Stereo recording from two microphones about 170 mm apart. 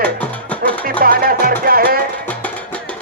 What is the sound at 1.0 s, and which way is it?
Music, 55° right (ahead or behind).